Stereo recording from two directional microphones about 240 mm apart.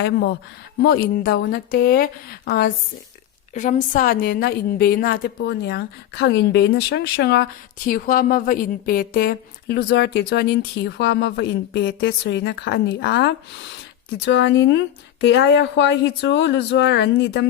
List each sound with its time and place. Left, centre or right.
0.8 s a woman's voice: left